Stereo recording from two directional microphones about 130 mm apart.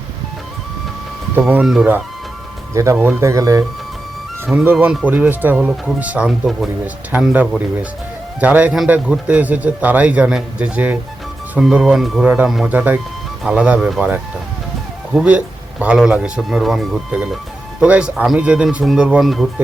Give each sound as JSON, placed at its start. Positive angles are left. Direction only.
{"t": 1.6, "sound": "a man's voice", "side_deg": 0}
{"t": 2.7, "sound": "speech", "side_deg": -20}
{"t": 4.6, "sound": "a man's voice", "side_deg": -15}
{"t": 12.2, "sound": "a man's voice", "side_deg": -10}